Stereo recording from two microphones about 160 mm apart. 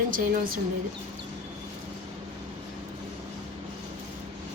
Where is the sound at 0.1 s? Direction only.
55° right (ahead or behind).